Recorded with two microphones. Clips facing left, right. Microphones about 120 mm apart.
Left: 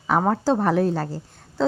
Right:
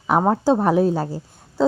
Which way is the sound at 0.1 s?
15° right (ahead or behind).